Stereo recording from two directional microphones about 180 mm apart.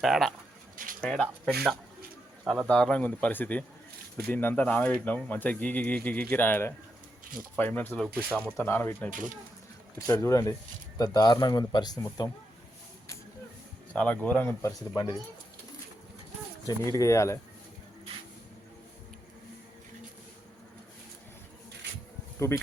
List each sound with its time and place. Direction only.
0.0 s speech: centre (ahead or behind)
0.8 s a sound: 50° right (ahead or behind)
1.1 s speech: 5° left (ahead or behind)
8.0 s speech: 5° right (ahead or behind)
8.5 s speech: 10° left (ahead or behind)
10.1 s speech: 15° left (ahead or behind)
13.9 s speech: 5° left (ahead or behind)
16.6 s speech: 20° left (ahead or behind)
22.4 s bee: 15° left (ahead or behind)